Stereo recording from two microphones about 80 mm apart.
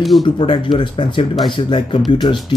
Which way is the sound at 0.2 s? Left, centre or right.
Left.